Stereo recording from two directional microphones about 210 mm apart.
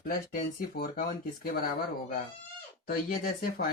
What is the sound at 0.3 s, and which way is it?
Speech, 45° left (ahead or behind).